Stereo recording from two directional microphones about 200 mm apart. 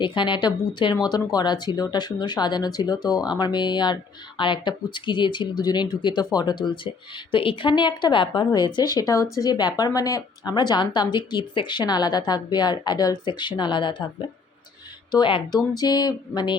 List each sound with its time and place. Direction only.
0.0 s speech: 25° left (ahead or behind)
15.1 s speech: 25° left (ahead or behind)